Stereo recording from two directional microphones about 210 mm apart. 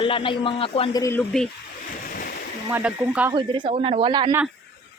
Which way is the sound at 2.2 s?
45° left (ahead or behind).